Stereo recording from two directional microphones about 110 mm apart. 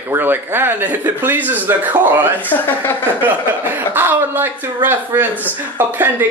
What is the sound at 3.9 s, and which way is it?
Speech, 20° right (ahead or behind).